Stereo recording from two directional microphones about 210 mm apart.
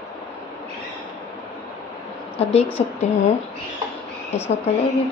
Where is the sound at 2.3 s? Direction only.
30° left (ahead or behind).